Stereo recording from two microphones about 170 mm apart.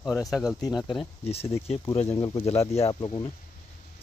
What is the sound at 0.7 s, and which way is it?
Speech, 25° left (ahead or behind).